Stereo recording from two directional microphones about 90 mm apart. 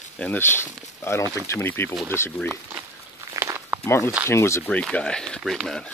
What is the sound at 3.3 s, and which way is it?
Walk, 30° right (ahead or behind).